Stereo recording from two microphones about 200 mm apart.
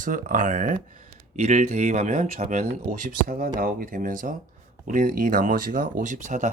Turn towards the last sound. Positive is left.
turn(degrees=-35)  # may be behind; listen again after turning